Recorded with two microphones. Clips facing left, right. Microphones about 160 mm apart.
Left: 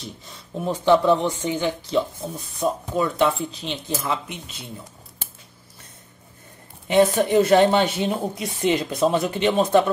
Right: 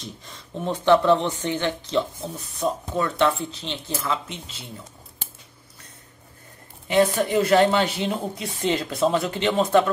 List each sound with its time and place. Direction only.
0.0 s speech: 5° left (ahead or behind)
6.9 s speech: 20° left (ahead or behind)